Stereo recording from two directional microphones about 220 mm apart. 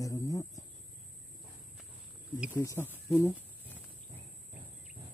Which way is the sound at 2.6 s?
15° left (ahead or behind).